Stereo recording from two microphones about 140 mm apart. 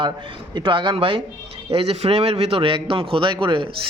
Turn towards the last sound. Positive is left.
turn(degrees=-35)  # may be behind; listen again after turning